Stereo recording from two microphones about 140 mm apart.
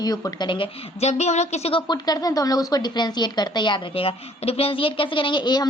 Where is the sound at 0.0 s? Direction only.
25° left (ahead or behind); by 1.8 s 50° left (ahead or behind).